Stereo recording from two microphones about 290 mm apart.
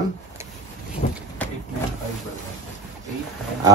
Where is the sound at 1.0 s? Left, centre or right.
Left.